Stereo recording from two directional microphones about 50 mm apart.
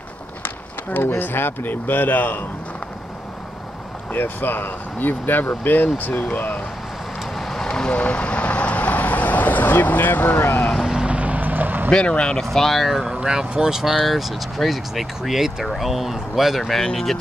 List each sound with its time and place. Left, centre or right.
0.9 s speech: left
4.1 s speech: left
7.3 s vehicle: centre; by 10.6 s left
11.0 s vehicle: right
11.9 s speech: centre
12.4 s speech: centre
13.9 s speech: centre